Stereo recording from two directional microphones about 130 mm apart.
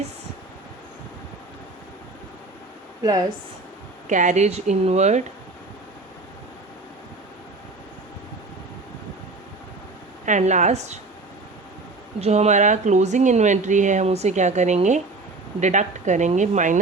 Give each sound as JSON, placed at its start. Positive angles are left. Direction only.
{"t": 3.0, "sound": "speech", "side_deg": -30}
{"t": 4.1, "sound": "speech", "side_deg": -70}
{"t": 10.2, "sound": "speech", "side_deg": -70}
{"t": 12.2, "sound": "speech", "side_deg": -55}